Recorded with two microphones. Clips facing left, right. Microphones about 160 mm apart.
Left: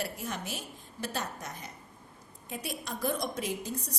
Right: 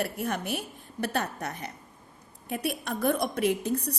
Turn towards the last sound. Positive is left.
turn(degrees=-65)  # may be behind; listen again after turning